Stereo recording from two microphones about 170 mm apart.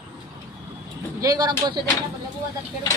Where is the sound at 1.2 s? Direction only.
25° right (ahead or behind).